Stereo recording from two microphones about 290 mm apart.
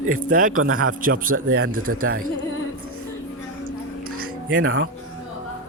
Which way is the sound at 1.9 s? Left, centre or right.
Right.